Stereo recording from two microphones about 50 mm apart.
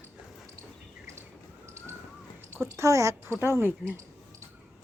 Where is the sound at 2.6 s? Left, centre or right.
Right.